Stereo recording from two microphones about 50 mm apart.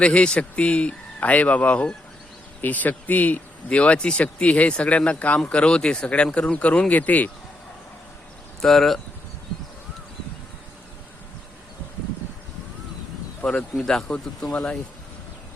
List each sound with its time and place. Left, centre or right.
0.0 s speech: left
8.6 s speech: centre
13.4 s speech: centre